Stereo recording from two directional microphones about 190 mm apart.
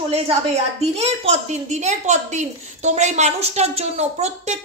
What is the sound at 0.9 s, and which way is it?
A woman's voice, 35° right (ahead or behind).